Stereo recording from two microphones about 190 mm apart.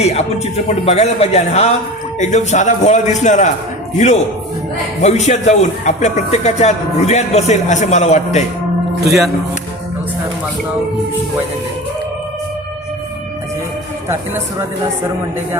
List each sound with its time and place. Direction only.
0.0 s speech: 35° left (ahead or behind)